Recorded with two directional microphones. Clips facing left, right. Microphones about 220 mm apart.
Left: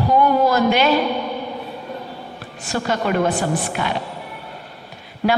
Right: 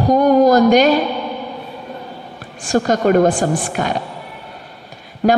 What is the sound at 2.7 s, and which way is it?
A woman's voice, 45° right (ahead or behind).